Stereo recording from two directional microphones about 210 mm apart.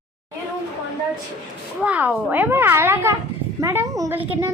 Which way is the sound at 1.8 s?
5° right (ahead or behind).